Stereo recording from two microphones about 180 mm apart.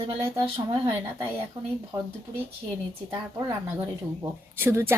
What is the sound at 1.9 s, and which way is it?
Speech, 15° right (ahead or behind).